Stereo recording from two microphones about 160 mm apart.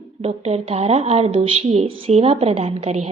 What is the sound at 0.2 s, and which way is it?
Speech, 40° right (ahead or behind).